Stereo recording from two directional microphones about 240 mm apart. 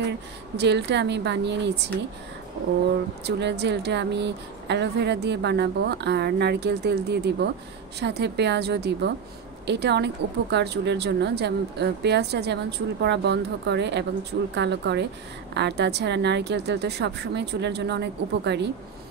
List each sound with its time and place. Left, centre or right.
0.6 s speech: right
3.3 s speech: right